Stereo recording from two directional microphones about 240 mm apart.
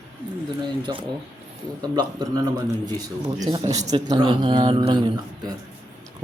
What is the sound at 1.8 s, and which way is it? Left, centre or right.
Speech, centre.